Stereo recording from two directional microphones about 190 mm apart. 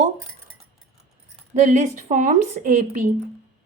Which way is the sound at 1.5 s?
40° right (ahead or behind).